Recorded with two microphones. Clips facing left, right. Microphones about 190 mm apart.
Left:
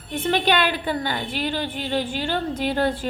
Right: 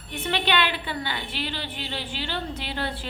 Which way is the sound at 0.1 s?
45° left (ahead or behind).